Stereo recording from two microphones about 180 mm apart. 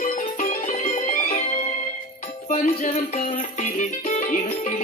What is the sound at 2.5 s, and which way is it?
Music, 35° left (ahead or behind).